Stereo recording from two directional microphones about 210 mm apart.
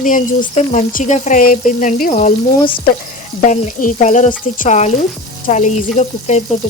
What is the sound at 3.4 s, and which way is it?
Speech, 40° left (ahead or behind).